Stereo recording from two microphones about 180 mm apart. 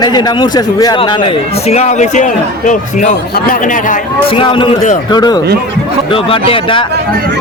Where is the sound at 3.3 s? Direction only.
55° left (ahead or behind).